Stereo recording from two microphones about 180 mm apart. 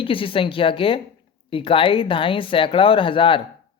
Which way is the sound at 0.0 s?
30° left (ahead or behind).